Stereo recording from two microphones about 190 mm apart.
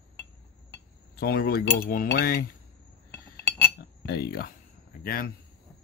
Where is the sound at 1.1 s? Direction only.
55° left (ahead or behind).